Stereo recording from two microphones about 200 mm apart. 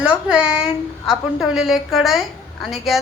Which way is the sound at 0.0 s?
5° right (ahead or behind).